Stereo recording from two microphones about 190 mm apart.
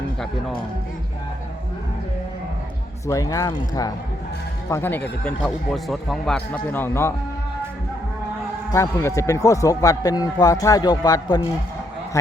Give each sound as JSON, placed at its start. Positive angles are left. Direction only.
{"t": 3.1, "sound": "speech", "side_deg": 15}
{"t": 8.7, "sound": "speech", "side_deg": 15}